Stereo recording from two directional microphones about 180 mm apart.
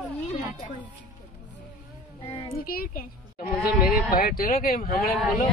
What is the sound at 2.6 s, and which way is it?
Speech, 55° left (ahead or behind).